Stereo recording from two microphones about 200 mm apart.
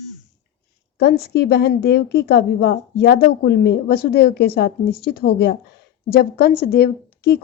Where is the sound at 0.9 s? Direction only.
55° left (ahead or behind).